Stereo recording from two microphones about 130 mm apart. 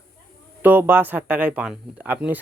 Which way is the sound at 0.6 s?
15° right (ahead or behind).